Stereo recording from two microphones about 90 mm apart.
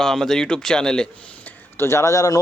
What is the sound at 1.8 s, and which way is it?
Speech, 30° left (ahead or behind).